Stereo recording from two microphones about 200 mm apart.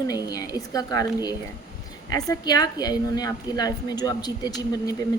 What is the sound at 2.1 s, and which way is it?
A woman's voice, 20° left (ahead or behind).